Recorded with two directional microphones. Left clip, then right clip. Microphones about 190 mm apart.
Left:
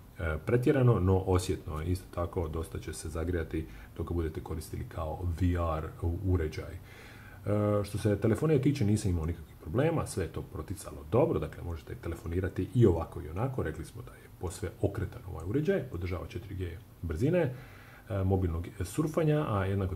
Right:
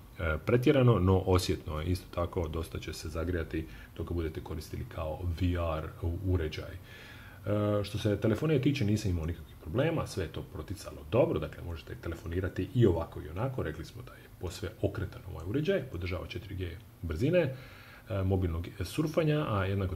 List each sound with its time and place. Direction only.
0.2 s speech: 10° right (ahead or behind); by 5.9 s 10° left (ahead or behind)
7.4 s speech: 10° left (ahead or behind)